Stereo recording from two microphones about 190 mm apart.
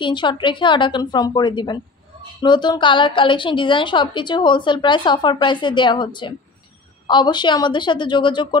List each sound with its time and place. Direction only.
0.0 s a woman's voice: 25° left (ahead or behind)